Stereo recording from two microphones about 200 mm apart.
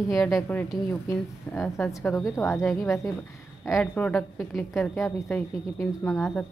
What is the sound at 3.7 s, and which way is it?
A woman's voice, 5° left (ahead or behind).